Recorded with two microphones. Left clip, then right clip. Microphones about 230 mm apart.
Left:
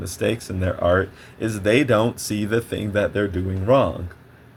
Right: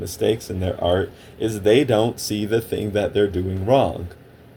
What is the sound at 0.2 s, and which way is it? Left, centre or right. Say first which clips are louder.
Speech: right 2 dB; left.